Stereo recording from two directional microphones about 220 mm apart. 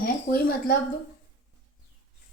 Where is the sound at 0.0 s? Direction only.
40° left (ahead or behind).